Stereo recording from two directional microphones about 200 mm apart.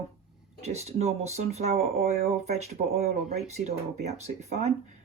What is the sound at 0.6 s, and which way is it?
Speech, 35° right (ahead or behind).